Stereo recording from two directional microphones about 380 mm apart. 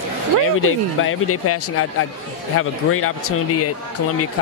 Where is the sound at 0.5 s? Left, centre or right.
Left.